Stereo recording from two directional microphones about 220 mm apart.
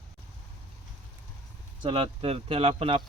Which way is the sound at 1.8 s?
25° right (ahead or behind).